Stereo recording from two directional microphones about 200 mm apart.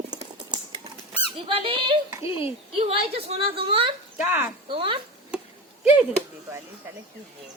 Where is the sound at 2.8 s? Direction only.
30° right (ahead or behind).